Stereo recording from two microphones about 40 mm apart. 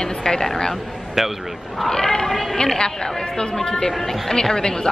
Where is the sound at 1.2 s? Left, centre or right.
Centre.